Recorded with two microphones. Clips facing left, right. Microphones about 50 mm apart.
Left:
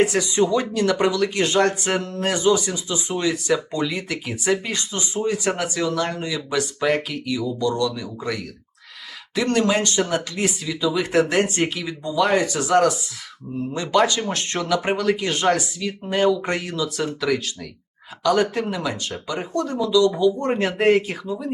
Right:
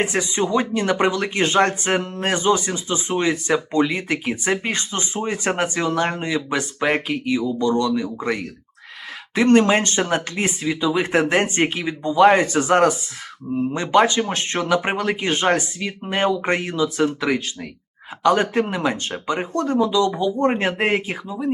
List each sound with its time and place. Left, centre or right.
0.0 s speech: right